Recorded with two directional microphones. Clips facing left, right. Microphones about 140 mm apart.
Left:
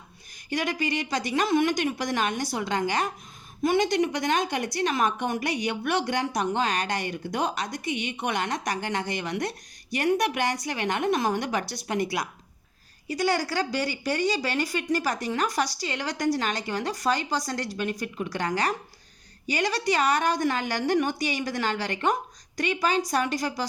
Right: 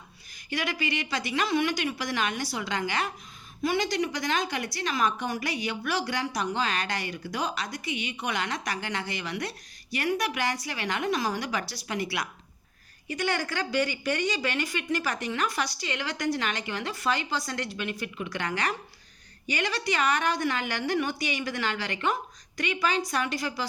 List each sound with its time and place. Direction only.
0.5 s a woman's voice: 45° left (ahead or behind)